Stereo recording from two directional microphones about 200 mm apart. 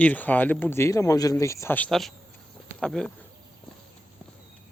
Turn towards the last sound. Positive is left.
turn(degrees=5)  # may be behind; listen again after turning